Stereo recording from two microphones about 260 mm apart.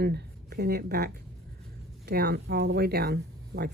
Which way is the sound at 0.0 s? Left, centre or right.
Right.